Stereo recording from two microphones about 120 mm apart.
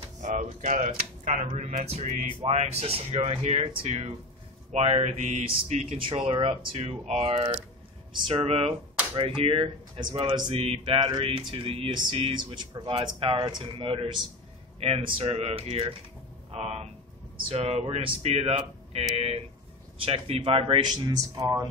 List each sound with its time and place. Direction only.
0.2 s speech: 90° right
1.6 s music: 70° right (ahead or behind)
2.4 s speech: 65° right (ahead or behind)
5.9 s speech: 50° right (ahead or behind)
21.0 s speech: 30° right (ahead or behind)